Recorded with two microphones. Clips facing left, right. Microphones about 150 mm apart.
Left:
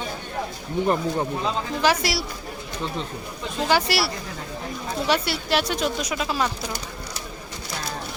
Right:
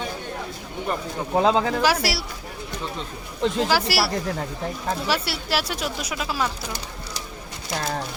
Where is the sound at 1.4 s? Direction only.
90° right.